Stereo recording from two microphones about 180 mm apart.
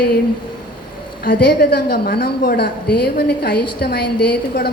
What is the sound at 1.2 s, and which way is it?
A woman's voice, 55° left (ahead or behind).